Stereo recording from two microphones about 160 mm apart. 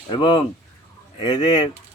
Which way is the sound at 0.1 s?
30° left (ahead or behind).